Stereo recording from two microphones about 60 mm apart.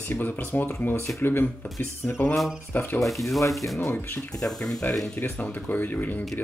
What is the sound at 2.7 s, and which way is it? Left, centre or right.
Speech, left.